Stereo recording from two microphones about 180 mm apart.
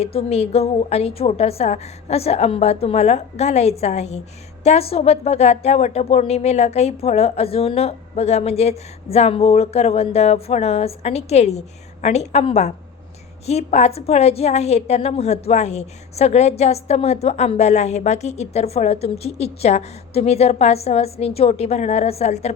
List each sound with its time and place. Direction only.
0.0 s a woman's voice: 35° left (ahead or behind)